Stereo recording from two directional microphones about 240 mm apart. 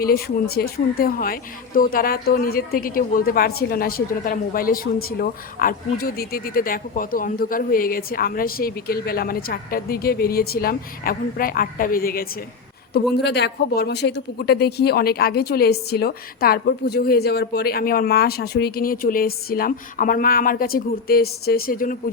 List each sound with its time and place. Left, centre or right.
0.0 s speech: left